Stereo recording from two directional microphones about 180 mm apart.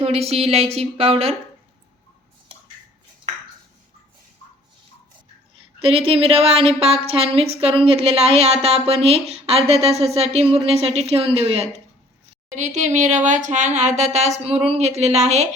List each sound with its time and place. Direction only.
0.3 s a woman's voice: 35° right (ahead or behind)
5.8 s a woman's voice: 30° right (ahead or behind)